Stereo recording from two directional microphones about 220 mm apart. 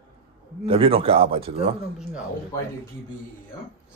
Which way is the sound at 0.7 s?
25° right (ahead or behind).